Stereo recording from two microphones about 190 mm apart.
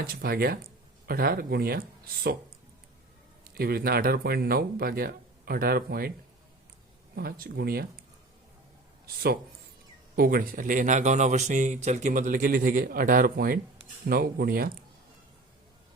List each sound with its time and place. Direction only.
0.0 s speech: 55° right (ahead or behind)
3.4 s speech: 50° right (ahead or behind)
7.2 s speech: 50° right (ahead or behind)
10.2 s speech: 50° right (ahead or behind)